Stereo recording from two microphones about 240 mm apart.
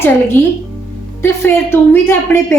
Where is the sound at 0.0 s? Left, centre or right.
Centre.